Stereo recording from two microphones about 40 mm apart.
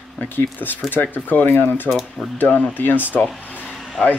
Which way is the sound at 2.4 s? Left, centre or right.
Left.